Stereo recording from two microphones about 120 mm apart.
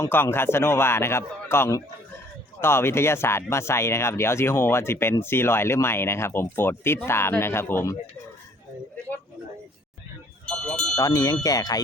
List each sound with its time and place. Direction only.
0.0 s speech: 20° left (ahead or behind)
10.4 s a sound: 5° left (ahead or behind)
10.9 s speech: 30° left (ahead or behind)